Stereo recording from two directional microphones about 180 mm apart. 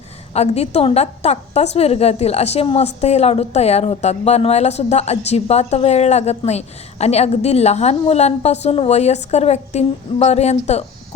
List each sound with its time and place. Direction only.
0.3 s a woman's voice: 35° left (ahead or behind)